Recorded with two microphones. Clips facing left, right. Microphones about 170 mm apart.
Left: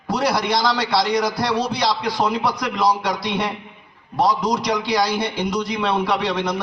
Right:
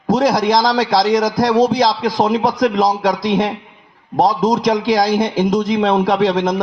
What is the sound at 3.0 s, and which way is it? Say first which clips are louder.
A man's voice: right 7 dB; 90° right.